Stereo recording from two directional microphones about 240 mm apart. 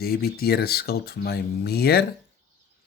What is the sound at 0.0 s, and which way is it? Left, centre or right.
Speech, left.